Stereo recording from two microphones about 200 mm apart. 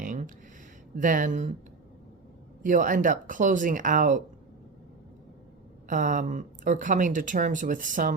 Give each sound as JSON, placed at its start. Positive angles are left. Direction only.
{"t": 0.0, "sound": "a sound", "side_deg": -40}
{"t": 0.9, "sound": "speech", "side_deg": -40}
{"t": 2.6, "sound": "speech", "side_deg": -40}
{"t": 5.9, "sound": "speech", "side_deg": -40}